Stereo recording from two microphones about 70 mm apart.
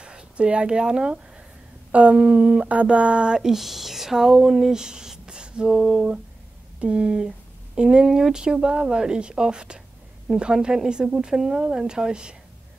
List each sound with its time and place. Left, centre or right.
0.0 s speech: centre